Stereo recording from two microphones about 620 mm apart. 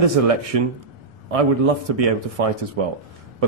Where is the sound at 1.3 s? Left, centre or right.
Right.